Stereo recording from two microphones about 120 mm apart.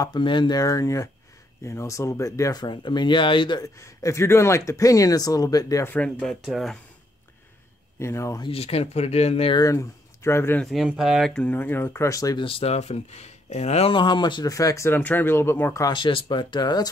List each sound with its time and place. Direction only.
0.0 s speech: 40° left (ahead or behind)
2.6 s speech: 40° left (ahead or behind)
3.6 s speech: 25° left (ahead or behind)
5.9 s speech: 10° left (ahead or behind)
6.2 s speech: centre (ahead or behind)
8.0 s speech: 25° left (ahead or behind)
8.4 s speech: 55° left (ahead or behind)
9.5 s speech: 30° left (ahead or behind)
10.6 s speech: centre (ahead or behind); by 12.4 s 25° left (ahead or behind)
12.4 s speech: 50° left (ahead or behind)
13.9 s speech: 40° left (ahead or behind); by 15.8 s 20° left (ahead or behind)
15.9 s speech: 45° left (ahead or behind)